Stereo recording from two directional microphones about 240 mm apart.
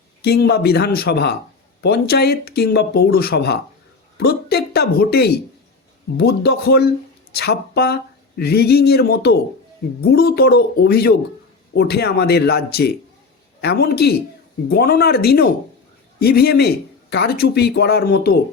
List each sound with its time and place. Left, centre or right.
0.2 s a man's voice: left